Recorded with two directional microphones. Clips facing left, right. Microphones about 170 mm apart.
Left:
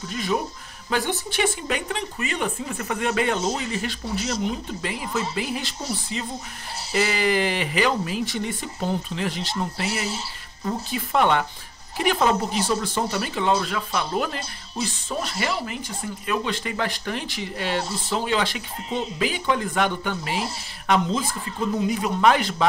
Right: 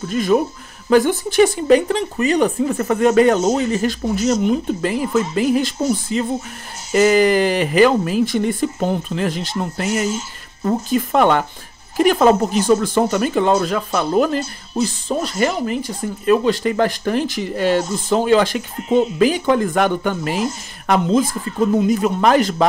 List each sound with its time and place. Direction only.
0.1 s speech: 45° right (ahead or behind)